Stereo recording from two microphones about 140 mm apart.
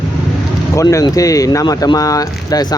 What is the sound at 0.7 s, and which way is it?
Speech, 20° left (ahead or behind).